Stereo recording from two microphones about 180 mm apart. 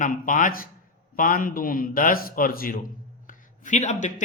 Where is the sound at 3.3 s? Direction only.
40° left (ahead or behind).